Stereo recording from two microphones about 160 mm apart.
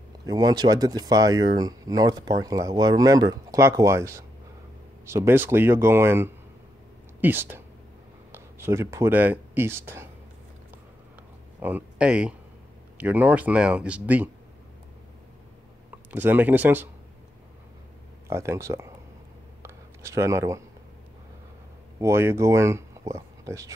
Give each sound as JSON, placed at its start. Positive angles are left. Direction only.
{"t": 0.3, "sound": "speech", "side_deg": -25}
{"t": 11.6, "sound": "speech", "side_deg": -10}
{"t": 16.1, "sound": "speech", "side_deg": -10}
{"t": 18.3, "sound": "speech", "side_deg": -15}
{"t": 19.6, "sound": "a sound", "side_deg": -15}
{"t": 22.0, "sound": "speech", "side_deg": -15}